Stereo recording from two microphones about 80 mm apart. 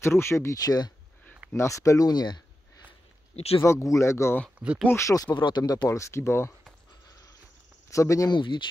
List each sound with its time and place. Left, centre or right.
0.0 s speech: left
0.7 s speech: left
1.5 s speech: left
3.6 s speech: left
5.3 s speech: left
7.9 s speech: left
8.3 s speech: left